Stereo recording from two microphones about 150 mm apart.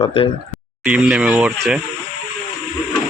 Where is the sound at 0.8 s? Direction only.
10° right (ahead or behind).